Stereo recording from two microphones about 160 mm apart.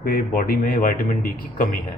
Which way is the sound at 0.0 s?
70° left (ahead or behind).